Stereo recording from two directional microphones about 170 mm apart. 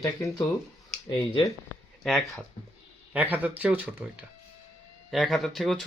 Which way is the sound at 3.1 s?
10° right (ahead or behind).